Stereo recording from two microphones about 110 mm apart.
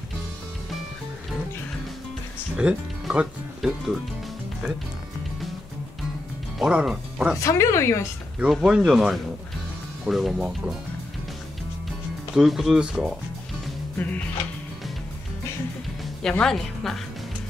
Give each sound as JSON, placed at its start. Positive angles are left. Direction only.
{"t": 2.5, "sound": "speech", "side_deg": -10}
{"t": 6.6, "sound": "speech", "side_deg": -5}
{"t": 7.3, "sound": "speech", "side_deg": 25}
{"t": 8.5, "sound": "a woman's voice", "side_deg": -5}
{"t": 12.4, "sound": "a woman's voice", "side_deg": -5}
{"t": 13.9, "sound": "music", "side_deg": 15}
{"t": 16.2, "sound": "a woman's voice", "side_deg": 5}